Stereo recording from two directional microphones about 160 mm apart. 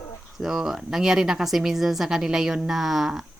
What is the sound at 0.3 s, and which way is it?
A woman's voice, centre (ahead or behind).